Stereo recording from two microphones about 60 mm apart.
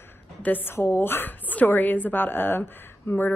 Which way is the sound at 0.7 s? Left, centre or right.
Left.